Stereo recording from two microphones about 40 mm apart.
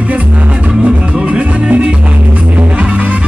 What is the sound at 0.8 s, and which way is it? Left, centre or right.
Music, right.